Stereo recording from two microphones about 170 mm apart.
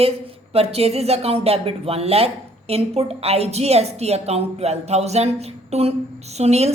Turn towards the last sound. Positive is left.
turn(degrees=-40)  # may be behind; listen again after turning